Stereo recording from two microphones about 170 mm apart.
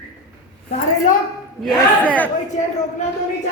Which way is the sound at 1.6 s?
10° left (ahead or behind).